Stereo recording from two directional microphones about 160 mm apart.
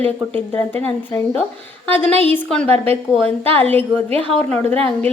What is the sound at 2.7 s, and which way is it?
Speech, 40° right (ahead or behind).